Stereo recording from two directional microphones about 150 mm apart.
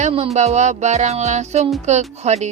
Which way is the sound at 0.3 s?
50° right (ahead or behind).